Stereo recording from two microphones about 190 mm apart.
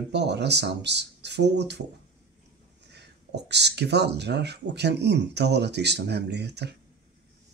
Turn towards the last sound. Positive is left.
turn(degrees=-60)  # may be behind; listen again after turning